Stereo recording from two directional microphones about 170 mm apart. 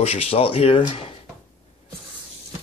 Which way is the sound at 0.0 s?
35° left (ahead or behind).